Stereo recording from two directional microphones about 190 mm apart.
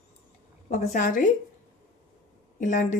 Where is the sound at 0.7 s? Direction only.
40° left (ahead or behind).